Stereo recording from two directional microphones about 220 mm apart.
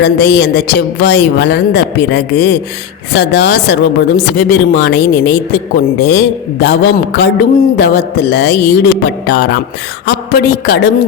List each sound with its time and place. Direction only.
0.0 s a woman's voice: 50° left (ahead or behind)